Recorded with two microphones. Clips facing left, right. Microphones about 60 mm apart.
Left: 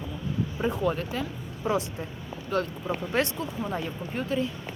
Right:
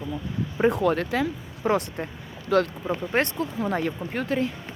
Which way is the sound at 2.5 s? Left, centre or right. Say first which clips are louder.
Right 7 dB; right.